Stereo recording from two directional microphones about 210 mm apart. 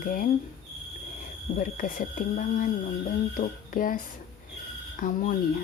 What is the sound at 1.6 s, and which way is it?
Speech, 40° left (ahead or behind).